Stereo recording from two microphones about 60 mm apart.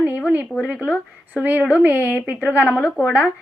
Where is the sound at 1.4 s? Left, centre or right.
Right.